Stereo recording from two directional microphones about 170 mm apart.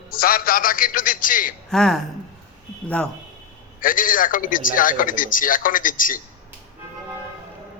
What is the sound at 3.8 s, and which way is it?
A man's voice, 55° left (ahead or behind).